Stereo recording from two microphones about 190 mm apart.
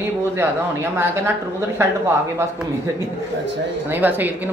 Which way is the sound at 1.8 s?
15° right (ahead or behind).